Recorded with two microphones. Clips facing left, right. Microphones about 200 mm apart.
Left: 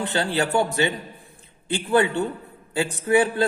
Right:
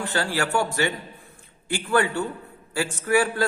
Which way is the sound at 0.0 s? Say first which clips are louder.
Left 2 dB; 20° left (ahead or behind).